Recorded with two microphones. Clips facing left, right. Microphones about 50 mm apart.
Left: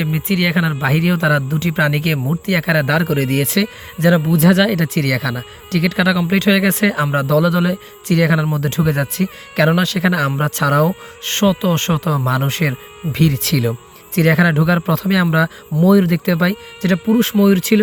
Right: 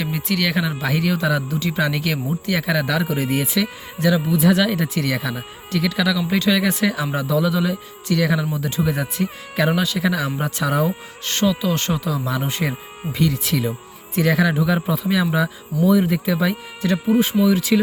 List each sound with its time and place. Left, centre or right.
0.0 s speech: left
4.0 s speech: left
4.4 s speech: left
5.8 s speech: left
7.3 s speech: left
11.3 s speech: left
13.4 s speech: left
14.2 s speech: left
17.4 s speech: left